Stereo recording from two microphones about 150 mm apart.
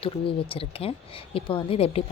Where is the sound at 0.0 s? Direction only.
35° left (ahead or behind).